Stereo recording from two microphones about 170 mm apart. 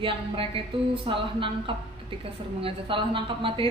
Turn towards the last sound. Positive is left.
turn(degrees=-30)  # may be behind; listen again after turning